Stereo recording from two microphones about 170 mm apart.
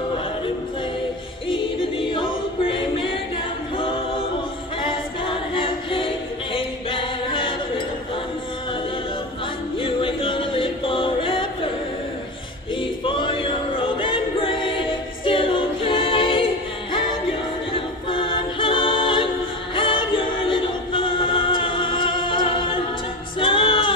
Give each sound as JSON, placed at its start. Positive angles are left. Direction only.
{"t": 1.5, "sound": "music", "side_deg": 30}
{"t": 3.7, "sound": "a capella", "side_deg": 30}
{"t": 4.8, "sound": "music", "side_deg": 30}
{"t": 9.8, "sound": "music", "side_deg": 30}
{"t": 12.8, "sound": "choir", "side_deg": 30}
{"t": 17.7, "sound": "a capella", "side_deg": 30}
{"t": 19.7, "sound": "music", "side_deg": 30}